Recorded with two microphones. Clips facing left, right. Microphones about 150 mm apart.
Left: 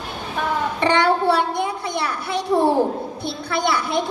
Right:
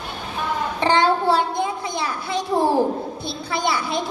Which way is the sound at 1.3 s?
65° left (ahead or behind).